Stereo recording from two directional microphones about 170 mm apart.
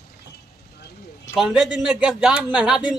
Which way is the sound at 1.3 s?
Centre (ahead or behind).